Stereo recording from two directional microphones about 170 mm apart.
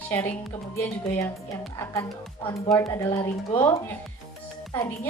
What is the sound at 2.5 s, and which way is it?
Speech, 20° left (ahead or behind).